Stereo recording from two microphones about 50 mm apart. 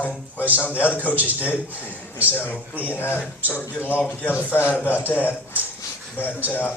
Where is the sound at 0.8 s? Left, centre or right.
Left.